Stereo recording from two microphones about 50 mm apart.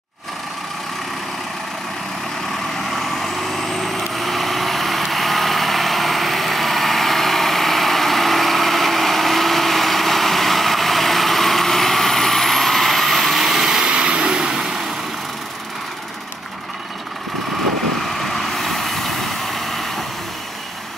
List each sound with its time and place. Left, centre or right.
3.0 s vehicle: centre
18.2 s vehicle: centre